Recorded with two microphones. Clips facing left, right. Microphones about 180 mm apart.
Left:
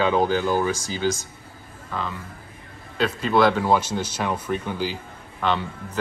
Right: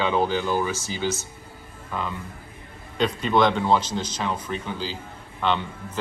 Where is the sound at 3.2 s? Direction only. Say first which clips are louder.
Left 2 dB; 5° left (ahead or behind).